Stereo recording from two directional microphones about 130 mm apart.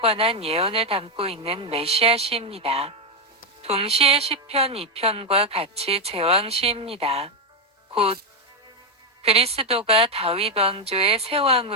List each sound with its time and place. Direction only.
0.0 s a woman's voice: 50° right (ahead or behind)
9.2 s a woman's voice: 50° right (ahead or behind)